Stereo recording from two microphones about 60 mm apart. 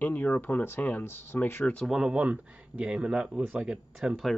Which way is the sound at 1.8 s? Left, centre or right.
Centre.